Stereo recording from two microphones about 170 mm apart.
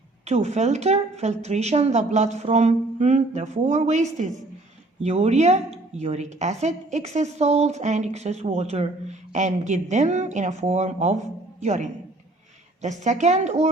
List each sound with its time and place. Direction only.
0.3 s a woman's voice: 40° right (ahead or behind)